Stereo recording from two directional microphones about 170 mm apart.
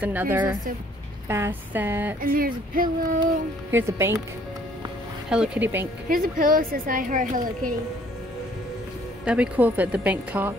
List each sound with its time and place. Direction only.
0.0 s speech: 10° right (ahead or behind)
2.2 s speech: 60° right (ahead or behind)
3.7 s speech: 15° right (ahead or behind)
5.3 s speech: 5° right (ahead or behind)
6.0 s speech: 55° right (ahead or behind)
9.2 s speech: 5° right (ahead or behind)